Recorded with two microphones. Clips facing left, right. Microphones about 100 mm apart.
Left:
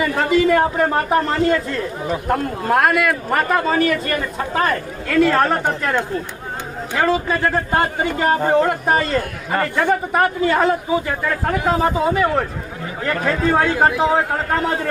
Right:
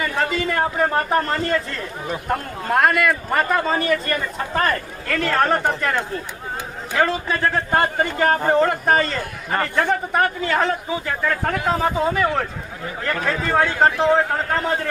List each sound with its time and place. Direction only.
0.0 s a man's voice: 5° left (ahead or behind)